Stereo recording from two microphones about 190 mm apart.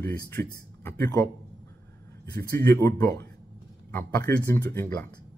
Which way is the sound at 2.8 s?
15° left (ahead or behind).